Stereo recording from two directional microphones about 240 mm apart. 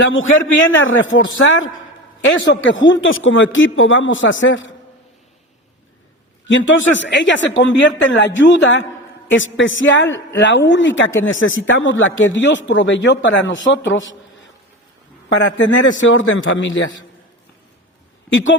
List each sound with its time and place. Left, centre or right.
0.0 s a man's voice: left
6.5 s a man's voice: left
15.3 s a man's voice: left
18.3 s speech: left